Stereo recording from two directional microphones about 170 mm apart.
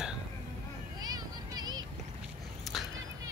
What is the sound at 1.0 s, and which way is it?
Vehicle, 20° right (ahead or behind).